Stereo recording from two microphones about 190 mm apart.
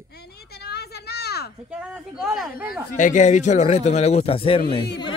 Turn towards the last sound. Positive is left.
turn(degrees=30)  # may be behind; listen again after turning